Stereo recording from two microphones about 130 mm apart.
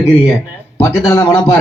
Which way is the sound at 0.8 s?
20° left (ahead or behind).